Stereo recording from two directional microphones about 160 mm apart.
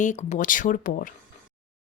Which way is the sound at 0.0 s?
50° left (ahead or behind).